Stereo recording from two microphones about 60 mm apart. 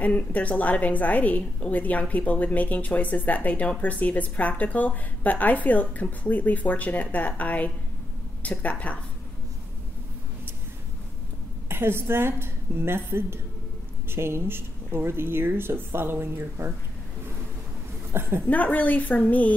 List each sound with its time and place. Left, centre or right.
0.0 s a woman's voice: left
11.7 s speech: right
18.1 s speech: right
18.5 s a woman's voice: left